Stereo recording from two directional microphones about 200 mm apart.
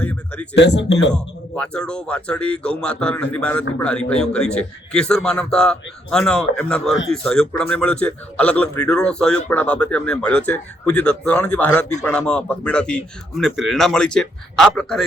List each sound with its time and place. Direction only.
0.0 s a sound: 5° left (ahead or behind)
0.5 s speech: 60° left (ahead or behind)
1.1 s speech: 5° left (ahead or behind)